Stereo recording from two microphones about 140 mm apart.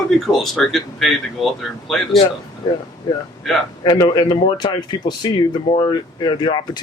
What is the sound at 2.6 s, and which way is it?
Speech, 30° left (ahead or behind).